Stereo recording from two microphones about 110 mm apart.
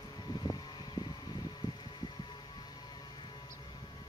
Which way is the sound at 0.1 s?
40° left (ahead or behind).